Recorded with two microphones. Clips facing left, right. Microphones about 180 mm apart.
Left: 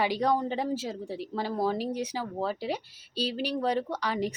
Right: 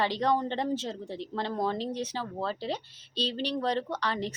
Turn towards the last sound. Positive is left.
turn(degrees=10)  # may be behind; listen again after turning